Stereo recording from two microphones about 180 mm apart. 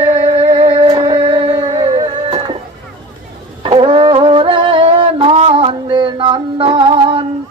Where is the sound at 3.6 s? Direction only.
30° right (ahead or behind).